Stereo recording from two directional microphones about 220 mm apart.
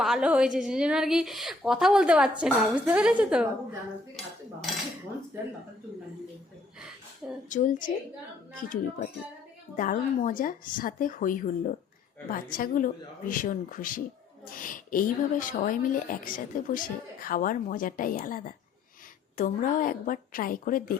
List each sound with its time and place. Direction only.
0.0 s a woman's voice: 5° right (ahead or behind)
7.5 s a woman's voice: 35° left (ahead or behind)